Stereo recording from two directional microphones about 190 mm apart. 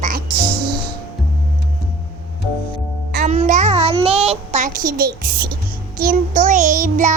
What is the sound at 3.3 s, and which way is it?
Child singing, 40° right (ahead or behind).